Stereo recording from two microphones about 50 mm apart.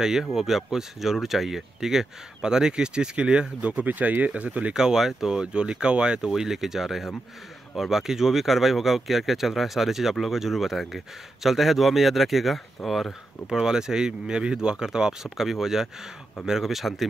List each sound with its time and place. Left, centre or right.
0.0 s speech: centre
3.8 s speech: right
4.7 s speech: centre
13.5 s speech: centre